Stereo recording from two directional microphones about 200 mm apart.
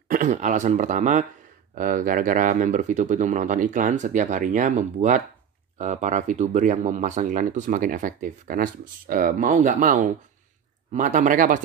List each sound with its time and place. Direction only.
0.1 s speech: 40° right (ahead or behind)